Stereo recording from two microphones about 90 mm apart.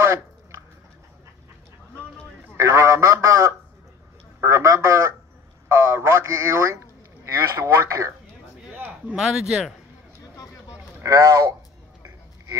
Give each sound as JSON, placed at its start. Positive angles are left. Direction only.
{"t": 2.5, "sound": "a man's voice", "side_deg": -30}
{"t": 8.7, "sound": "a sound", "side_deg": -15}
{"t": 9.2, "sound": "speech", "side_deg": -10}
{"t": 11.0, "sound": "a man's voice", "side_deg": -40}